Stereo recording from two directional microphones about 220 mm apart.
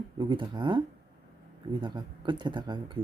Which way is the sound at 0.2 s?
20° right (ahead or behind).